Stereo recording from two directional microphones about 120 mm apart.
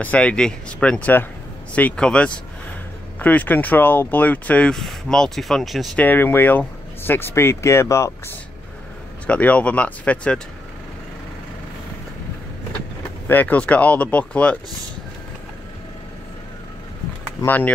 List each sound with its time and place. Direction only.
0.0 s speech: 10° left (ahead or behind)
5.9 s speech: 15° left (ahead or behind)
9.3 s speech: 10° left (ahead or behind)
13.3 s speech: 15° left (ahead or behind)
17.4 s speech: 30° left (ahead or behind)